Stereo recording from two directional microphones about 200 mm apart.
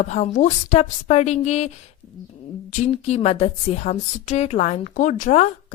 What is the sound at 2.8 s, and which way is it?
Speech, 35° left (ahead or behind).